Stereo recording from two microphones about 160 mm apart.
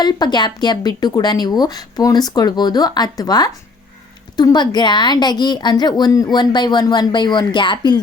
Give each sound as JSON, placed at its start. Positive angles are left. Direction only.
{"t": 0.0, "sound": "speech", "side_deg": 25}